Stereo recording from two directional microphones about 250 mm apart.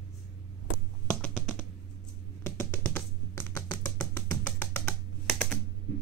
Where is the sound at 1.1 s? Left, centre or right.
Centre.